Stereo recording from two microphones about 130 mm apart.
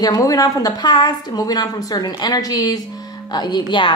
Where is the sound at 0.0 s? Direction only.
30° left (ahead or behind).